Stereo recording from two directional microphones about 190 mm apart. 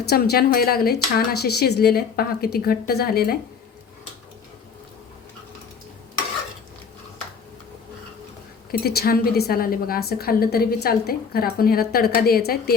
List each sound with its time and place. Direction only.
0.1 s speech: 55° left (ahead or behind)
8.7 s a woman's voice: 55° left (ahead or behind)